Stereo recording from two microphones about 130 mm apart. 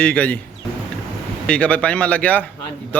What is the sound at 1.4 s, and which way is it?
A man's voice, 10° left (ahead or behind).